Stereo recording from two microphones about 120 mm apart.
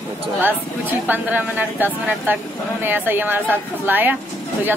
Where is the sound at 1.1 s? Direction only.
15° right (ahead or behind).